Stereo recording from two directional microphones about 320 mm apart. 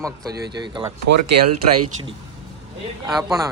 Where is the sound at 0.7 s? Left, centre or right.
Centre.